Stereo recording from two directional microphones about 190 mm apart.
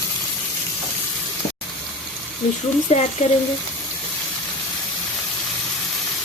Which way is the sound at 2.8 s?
40° left (ahead or behind).